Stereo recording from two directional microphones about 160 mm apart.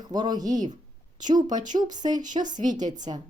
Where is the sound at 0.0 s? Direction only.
25° right (ahead or behind).